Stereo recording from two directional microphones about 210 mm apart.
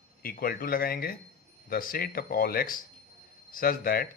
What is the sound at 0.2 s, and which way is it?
Speech, 45° left (ahead or behind).